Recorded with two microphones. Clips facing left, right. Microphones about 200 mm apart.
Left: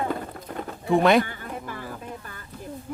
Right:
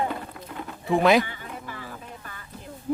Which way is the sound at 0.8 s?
Centre (ahead or behind).